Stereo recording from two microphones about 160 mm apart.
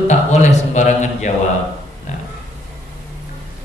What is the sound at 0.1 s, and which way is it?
A man's voice, 45° left (ahead or behind).